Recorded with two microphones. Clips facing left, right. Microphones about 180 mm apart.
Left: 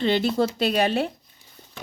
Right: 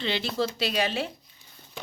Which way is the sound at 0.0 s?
50° left (ahead or behind).